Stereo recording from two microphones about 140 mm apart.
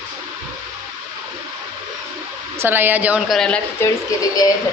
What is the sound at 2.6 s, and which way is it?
Speech, 15° right (ahead or behind).